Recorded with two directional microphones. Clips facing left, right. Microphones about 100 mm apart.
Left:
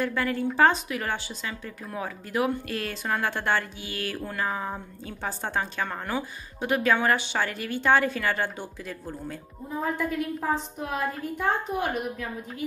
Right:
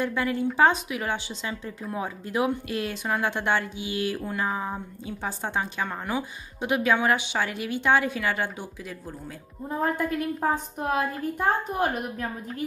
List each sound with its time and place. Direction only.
0.0 s a woman's voice: 15° right (ahead or behind)
10.5 s a woman's voice: 45° right (ahead or behind)